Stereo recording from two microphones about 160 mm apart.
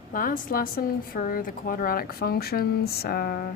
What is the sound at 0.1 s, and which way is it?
Speech, 60° left (ahead or behind).